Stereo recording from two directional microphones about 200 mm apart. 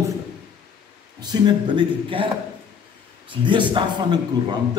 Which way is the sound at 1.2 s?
20° right (ahead or behind).